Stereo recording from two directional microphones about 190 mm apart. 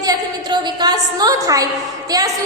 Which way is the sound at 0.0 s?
20° right (ahead or behind).